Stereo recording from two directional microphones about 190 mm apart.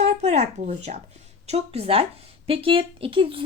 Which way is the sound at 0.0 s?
35° right (ahead or behind).